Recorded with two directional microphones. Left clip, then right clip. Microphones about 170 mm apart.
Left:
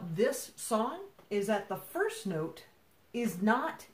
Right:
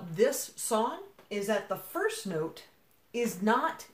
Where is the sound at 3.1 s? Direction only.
10° right (ahead or behind).